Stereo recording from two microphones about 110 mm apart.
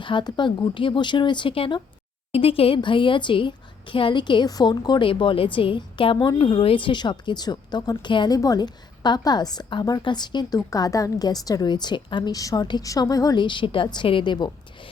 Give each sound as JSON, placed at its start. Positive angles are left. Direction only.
{"t": 0.0, "sound": "a woman's voice", "side_deg": 45}
{"t": 12.3, "sound": "a woman's voice", "side_deg": 35}